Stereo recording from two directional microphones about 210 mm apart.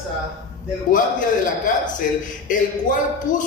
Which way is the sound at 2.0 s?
40° left (ahead or behind).